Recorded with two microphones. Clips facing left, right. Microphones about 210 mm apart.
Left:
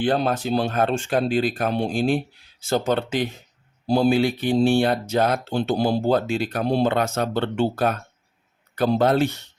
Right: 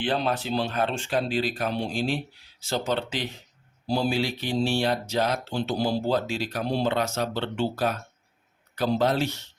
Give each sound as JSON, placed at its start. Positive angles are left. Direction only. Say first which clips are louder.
{"t": 0.0, "sound": "speech", "louder": "left 5 dB", "side_deg": 45}